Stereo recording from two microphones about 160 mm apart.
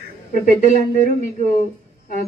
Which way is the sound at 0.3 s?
55° left (ahead or behind).